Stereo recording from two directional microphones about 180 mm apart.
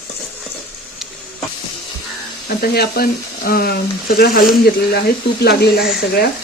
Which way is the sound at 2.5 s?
60° left (ahead or behind).